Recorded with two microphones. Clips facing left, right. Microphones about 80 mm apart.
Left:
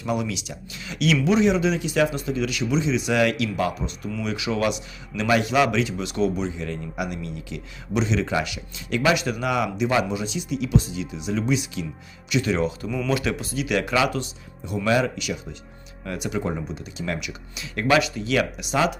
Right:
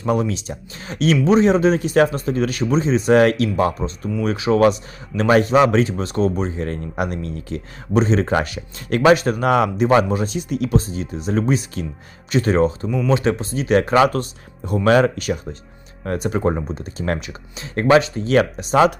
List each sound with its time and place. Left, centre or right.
0.0 s a man's voice: right